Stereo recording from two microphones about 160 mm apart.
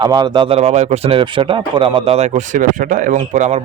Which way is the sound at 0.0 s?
25° right (ahead or behind).